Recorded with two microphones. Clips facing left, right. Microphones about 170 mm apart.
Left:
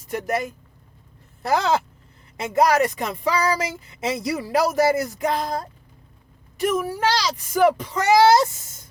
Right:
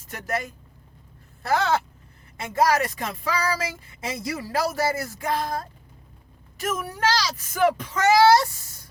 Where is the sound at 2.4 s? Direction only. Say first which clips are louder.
Left 4 dB; 20° left (ahead or behind).